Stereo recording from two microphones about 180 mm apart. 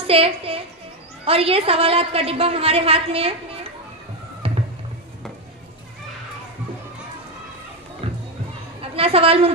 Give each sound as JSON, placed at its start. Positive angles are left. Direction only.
{"t": 0.0, "sound": "a woman's voice", "side_deg": -30}
{"t": 8.0, "sound": "music", "side_deg": -30}
{"t": 8.9, "sound": "a woman's voice", "side_deg": -30}